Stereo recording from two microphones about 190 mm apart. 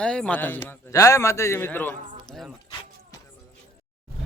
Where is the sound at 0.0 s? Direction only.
5° left (ahead or behind).